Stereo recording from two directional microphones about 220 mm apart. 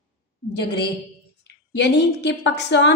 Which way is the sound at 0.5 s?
50° left (ahead or behind).